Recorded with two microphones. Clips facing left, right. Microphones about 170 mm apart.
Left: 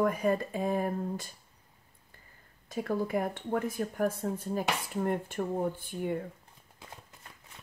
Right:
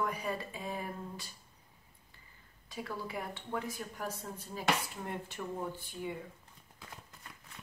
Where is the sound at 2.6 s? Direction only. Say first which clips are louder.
Left 9 dB; 50° left (ahead or behind).